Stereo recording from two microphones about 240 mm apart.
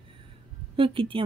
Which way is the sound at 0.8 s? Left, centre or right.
Right.